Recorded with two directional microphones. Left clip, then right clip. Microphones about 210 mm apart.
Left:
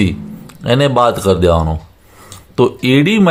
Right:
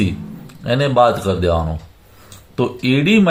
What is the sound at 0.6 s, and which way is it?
Speech, 40° left (ahead or behind).